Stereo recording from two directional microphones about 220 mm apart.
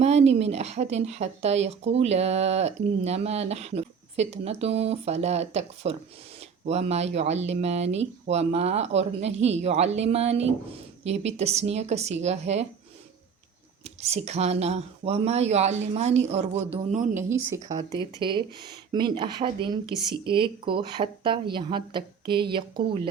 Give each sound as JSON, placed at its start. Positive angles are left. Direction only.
{"t": 0.0, "sound": "speech", "side_deg": -30}
{"t": 13.8, "sound": "speech", "side_deg": -30}
{"t": 17.2, "sound": "speech", "side_deg": -10}